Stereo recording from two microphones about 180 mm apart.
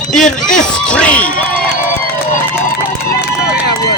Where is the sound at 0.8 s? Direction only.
5° left (ahead or behind).